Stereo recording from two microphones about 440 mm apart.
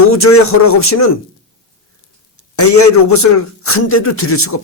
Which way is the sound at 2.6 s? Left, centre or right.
Left.